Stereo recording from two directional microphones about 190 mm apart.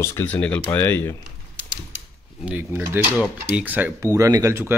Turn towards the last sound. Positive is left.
turn(degrees=-15)  # may be behind; listen again after turning